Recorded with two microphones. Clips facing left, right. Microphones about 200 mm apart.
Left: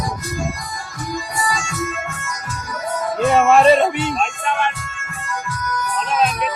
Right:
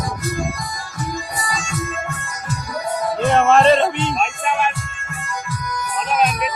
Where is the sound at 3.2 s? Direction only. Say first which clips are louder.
Left 1 dB; 5° left (ahead or behind).